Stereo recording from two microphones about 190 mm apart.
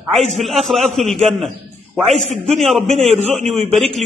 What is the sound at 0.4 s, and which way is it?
Speech, centre (ahead or behind).